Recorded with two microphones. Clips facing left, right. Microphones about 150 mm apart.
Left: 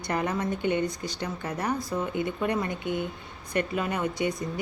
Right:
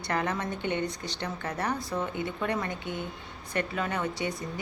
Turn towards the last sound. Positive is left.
turn(degrees=15)  # may be behind; listen again after turning